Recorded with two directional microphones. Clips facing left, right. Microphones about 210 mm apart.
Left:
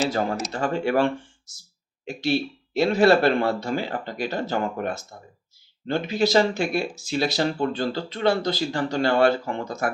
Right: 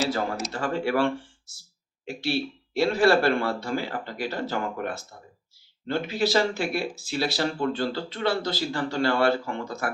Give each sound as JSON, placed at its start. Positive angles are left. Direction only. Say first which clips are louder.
{"t": 0.1, "sound": "speech", "louder": "left 2 dB", "side_deg": 20}
{"t": 2.0, "sound": "speech", "louder": "left 4 dB", "side_deg": 20}